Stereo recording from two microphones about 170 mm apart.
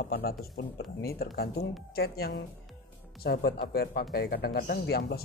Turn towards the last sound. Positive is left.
turn(degrees=65)  # may be behind; listen again after turning